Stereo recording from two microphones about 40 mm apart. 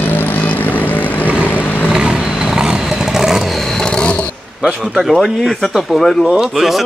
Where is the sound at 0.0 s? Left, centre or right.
Left.